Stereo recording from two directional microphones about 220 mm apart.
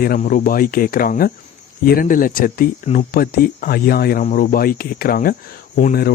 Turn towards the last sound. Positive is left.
turn(degrees=40)  # may be behind; listen again after turning